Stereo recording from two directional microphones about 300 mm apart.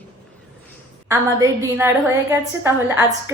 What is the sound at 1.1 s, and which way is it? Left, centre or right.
A woman's voice, centre.